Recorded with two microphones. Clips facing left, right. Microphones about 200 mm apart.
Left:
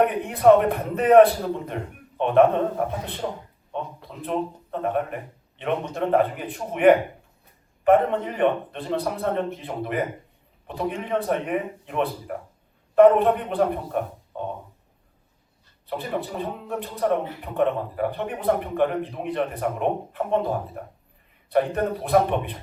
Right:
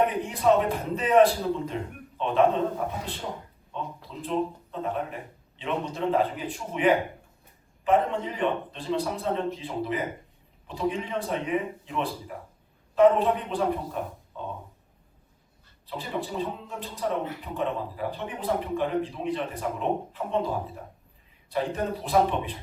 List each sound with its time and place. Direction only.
0.0 s a man's voice: 60° left (ahead or behind)
15.9 s a man's voice: 60° left (ahead or behind)